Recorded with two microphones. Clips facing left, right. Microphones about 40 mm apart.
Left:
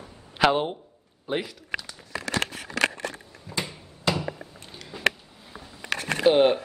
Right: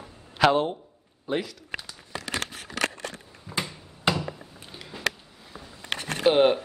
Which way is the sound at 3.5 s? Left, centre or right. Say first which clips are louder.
Even; centre.